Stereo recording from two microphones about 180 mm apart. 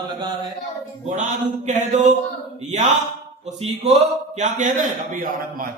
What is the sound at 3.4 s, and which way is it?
A man's voice, 40° right (ahead or behind).